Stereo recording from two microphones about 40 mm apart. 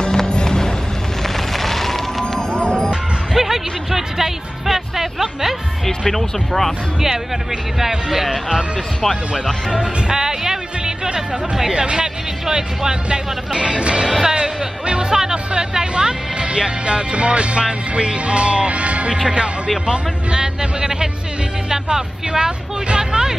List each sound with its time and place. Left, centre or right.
0.0 s music: centre
1.6 s music: centre
2.5 s music: left
3.3 s music: centre
5.9 s speech: centre
7.8 s speech: centre
9.7 s speech: centre
11.7 s speech: right
14.0 s speech: centre
14.3 s speech: right